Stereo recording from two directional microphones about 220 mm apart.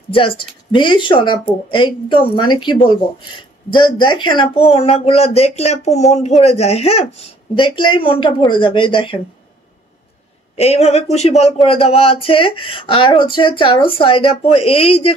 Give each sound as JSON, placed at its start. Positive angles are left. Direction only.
{"t": 0.1, "sound": "speech", "side_deg": 25}
{"t": 10.5, "sound": "speech", "side_deg": 30}